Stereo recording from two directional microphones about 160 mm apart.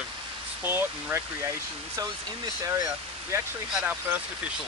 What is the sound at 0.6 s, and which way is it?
Speech, 15° right (ahead or behind).